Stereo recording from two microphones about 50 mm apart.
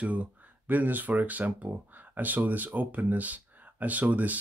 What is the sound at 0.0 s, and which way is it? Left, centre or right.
Speech, right.